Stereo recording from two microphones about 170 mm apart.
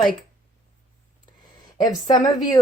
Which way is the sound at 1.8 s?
20° left (ahead or behind).